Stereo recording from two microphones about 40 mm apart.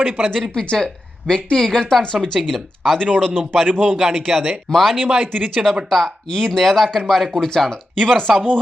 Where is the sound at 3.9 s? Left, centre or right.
Centre.